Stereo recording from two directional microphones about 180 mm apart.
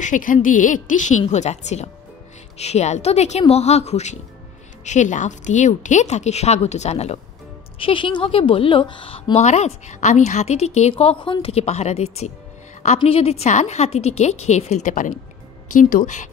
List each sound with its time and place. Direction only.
0.0 s a woman's voice: 45° left (ahead or behind)